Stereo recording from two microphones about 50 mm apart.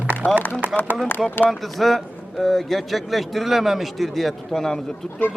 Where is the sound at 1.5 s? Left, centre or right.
Centre.